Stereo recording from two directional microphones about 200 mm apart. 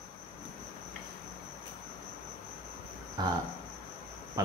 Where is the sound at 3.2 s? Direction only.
20° right (ahead or behind).